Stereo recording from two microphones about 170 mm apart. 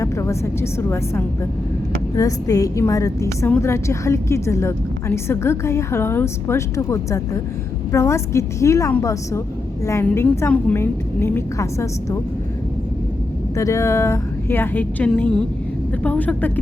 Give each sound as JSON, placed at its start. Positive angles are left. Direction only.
{"t": 0.0, "sound": "a woman's voice", "side_deg": 15}
{"t": 13.6, "sound": "a woman's voice", "side_deg": 15}